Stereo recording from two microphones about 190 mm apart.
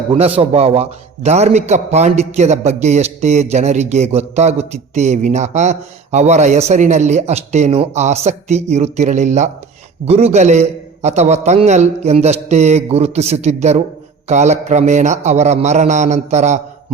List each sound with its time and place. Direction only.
0.1 s a man's voice: 30° right (ahead or behind)